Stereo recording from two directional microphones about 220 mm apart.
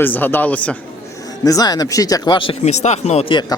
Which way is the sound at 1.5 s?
15° left (ahead or behind).